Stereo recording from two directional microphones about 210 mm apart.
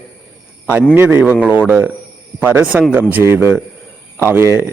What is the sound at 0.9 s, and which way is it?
A man's voice, 10° right (ahead or behind).